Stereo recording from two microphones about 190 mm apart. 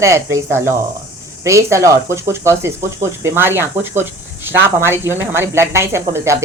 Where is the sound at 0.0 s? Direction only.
15° right (ahead or behind).